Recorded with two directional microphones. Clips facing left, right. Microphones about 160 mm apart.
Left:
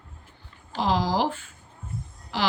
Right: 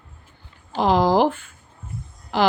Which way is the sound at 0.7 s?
55° right (ahead or behind).